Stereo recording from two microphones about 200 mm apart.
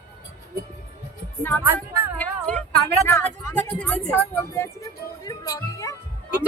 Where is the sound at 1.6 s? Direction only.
10° right (ahead or behind).